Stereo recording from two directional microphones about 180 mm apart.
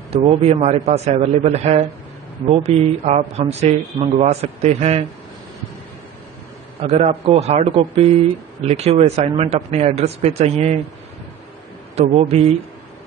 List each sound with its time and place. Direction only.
0.1 s a man's voice: 30° right (ahead or behind)
6.8 s a man's voice: 35° right (ahead or behind)
11.9 s a man's voice: 35° right (ahead or behind)